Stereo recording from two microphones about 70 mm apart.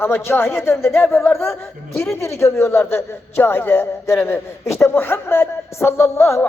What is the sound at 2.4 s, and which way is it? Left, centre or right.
A man's voice, left.